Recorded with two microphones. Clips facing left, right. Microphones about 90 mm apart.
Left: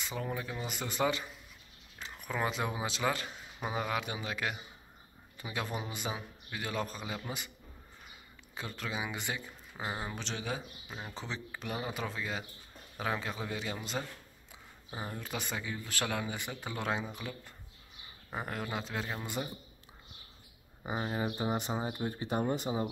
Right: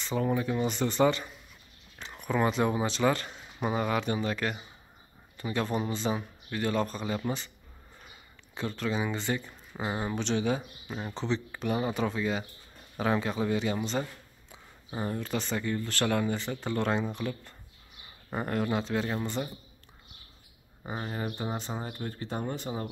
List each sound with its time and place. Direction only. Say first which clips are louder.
0.0 s speech: right 9 dB; centre (ahead or behind)
8.5 s speech: right 7 dB; 5° left (ahead or behind)
9.5 s speech: right 5 dB; 5° right (ahead or behind)
20.8 s speech: even; 10° left (ahead or behind)